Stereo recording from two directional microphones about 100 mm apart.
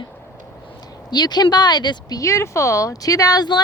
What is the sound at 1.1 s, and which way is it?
Speech, 45° left (ahead or behind).